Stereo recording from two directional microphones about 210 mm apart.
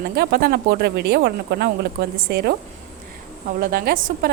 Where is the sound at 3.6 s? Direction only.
45° right (ahead or behind).